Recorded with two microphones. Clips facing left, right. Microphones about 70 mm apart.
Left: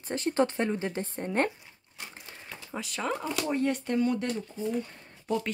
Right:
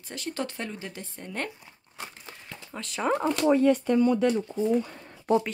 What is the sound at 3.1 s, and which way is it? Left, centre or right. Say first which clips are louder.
Speech: right 7 dB; centre.